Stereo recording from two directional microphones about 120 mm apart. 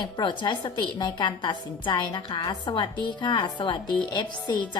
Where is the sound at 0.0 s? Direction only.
40° left (ahead or behind).